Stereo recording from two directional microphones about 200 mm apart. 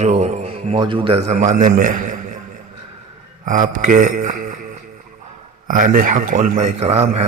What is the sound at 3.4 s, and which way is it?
A man's voice, 40° right (ahead or behind).